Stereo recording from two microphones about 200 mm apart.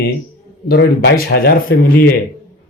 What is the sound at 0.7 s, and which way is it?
A man's voice, 55° left (ahead or behind).